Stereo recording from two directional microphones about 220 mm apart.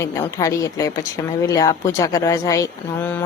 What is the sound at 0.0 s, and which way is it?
A woman's voice, 15° left (ahead or behind).